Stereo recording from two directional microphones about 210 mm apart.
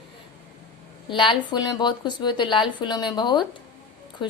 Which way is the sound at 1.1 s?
25° left (ahead or behind).